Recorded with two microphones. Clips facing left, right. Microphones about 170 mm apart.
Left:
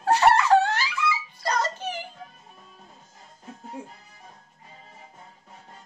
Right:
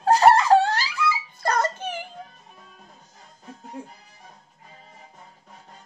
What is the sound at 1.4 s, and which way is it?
Music, 55° right (ahead or behind).